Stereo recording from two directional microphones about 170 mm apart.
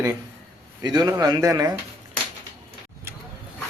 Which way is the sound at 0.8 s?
25° right (ahead or behind).